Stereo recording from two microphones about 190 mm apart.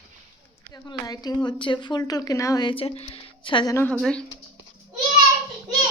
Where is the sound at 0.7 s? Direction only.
20° left (ahead or behind); by 4.2 s 5° left (ahead or behind).